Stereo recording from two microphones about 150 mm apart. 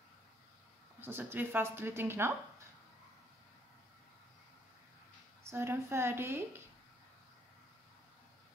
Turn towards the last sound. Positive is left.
turn(degrees=-15)  # may be behind; listen again after turning